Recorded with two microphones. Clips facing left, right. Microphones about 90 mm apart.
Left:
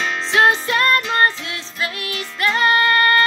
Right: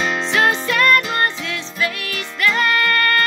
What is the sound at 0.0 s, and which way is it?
Music, 5° right (ahead or behind).